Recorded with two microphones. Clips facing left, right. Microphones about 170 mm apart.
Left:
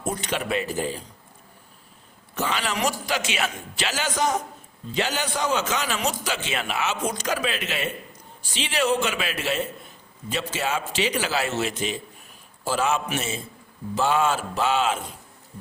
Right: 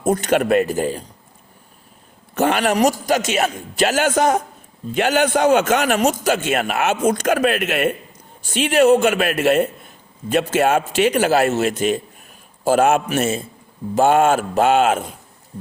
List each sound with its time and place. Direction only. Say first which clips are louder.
0.0 s a man's voice: right 11 dB; 45° right (ahead or behind)
2.3 s a man's voice: right 10 dB; 55° right (ahead or behind)